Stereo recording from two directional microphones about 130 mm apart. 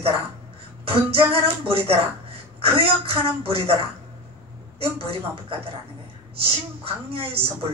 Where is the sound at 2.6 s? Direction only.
45° right (ahead or behind).